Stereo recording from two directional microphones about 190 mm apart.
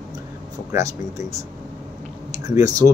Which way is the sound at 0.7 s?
15° right (ahead or behind).